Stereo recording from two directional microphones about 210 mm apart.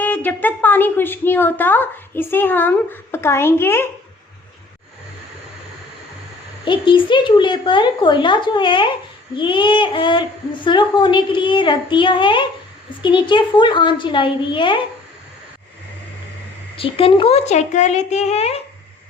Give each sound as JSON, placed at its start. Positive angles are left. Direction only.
{"t": 0.0, "sound": "a woman's voice", "side_deg": 10}
{"t": 6.7, "sound": "speech", "side_deg": 25}
{"t": 16.7, "sound": "speech", "side_deg": 25}